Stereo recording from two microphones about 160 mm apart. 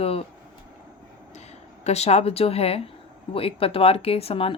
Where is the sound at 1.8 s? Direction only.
40° left (ahead or behind).